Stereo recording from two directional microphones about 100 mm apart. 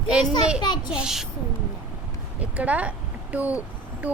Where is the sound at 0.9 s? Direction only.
5° right (ahead or behind).